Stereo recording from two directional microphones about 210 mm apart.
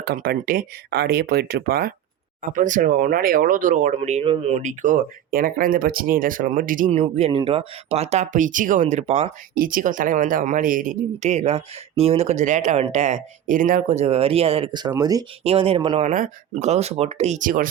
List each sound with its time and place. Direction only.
0.0 s speech: 50° right (ahead or behind)
2.4 s speech: 35° right (ahead or behind)
7.0 s speech: 30° right (ahead or behind)
16.0 s speech: 35° right (ahead or behind)